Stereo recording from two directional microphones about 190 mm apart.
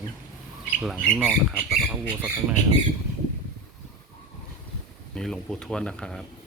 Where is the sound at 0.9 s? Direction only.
10° left (ahead or behind).